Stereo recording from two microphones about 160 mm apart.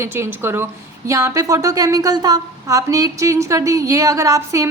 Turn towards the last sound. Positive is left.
turn(degrees=-20)  # may be behind; listen again after turning